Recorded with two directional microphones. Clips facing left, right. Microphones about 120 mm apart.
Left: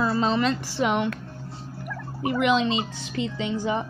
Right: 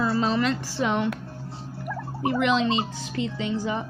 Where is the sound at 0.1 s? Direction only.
25° left (ahead or behind).